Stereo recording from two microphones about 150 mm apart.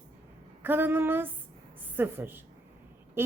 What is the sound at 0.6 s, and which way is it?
A woman's voice, 15° right (ahead or behind).